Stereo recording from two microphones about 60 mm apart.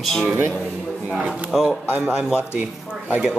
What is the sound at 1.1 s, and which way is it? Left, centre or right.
Speech, centre.